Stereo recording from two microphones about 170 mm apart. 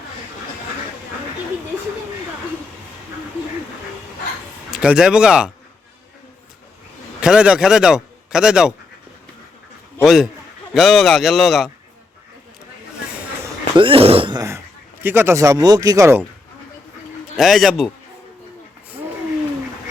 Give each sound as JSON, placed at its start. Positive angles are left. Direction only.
{"t": 4.7, "sound": "speech", "side_deg": -5}
{"t": 7.2, "sound": "a man's voice", "side_deg": -5}
{"t": 10.0, "sound": "speech", "side_deg": -5}
{"t": 13.7, "sound": "throat clearing", "side_deg": -30}
{"t": 15.0, "sound": "speech", "side_deg": -15}
{"t": 17.3, "sound": "speech", "side_deg": 0}